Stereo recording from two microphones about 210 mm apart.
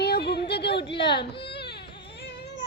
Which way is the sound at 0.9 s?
25° left (ahead or behind).